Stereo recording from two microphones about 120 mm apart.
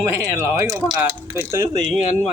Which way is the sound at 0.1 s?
25° right (ahead or behind).